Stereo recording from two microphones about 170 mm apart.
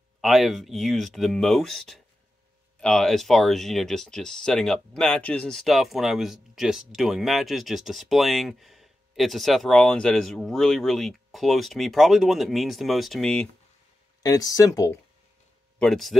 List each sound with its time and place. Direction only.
0.2 s speech: centre (ahead or behind)
14.2 s speech: 20° left (ahead or behind)
15.8 s speech: centre (ahead or behind)